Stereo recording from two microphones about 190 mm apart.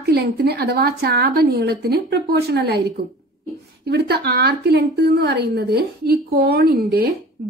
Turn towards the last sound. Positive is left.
turn(degrees=-60)  # may be behind; listen again after turning